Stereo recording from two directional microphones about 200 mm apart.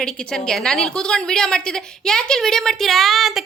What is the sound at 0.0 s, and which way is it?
A woman's voice, 5° left (ahead or behind).